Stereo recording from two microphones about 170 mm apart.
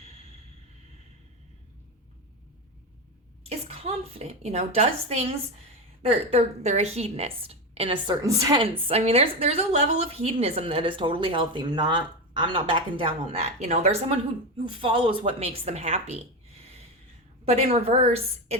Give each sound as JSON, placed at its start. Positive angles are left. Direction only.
{"t": 3.7, "sound": "a woman's voice", "side_deg": -35}
{"t": 8.2, "sound": "a woman's voice", "side_deg": -20}
{"t": 8.6, "sound": "a woman's voice", "side_deg": -35}
{"t": 14.8, "sound": "a woman's voice", "side_deg": -30}
{"t": 17.4, "sound": "a woman's voice", "side_deg": -35}